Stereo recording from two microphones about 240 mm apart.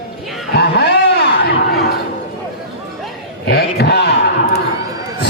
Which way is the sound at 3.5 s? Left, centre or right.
Left.